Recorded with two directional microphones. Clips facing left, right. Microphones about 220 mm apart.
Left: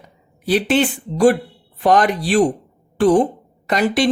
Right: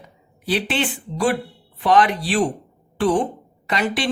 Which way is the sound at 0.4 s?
45° left (ahead or behind).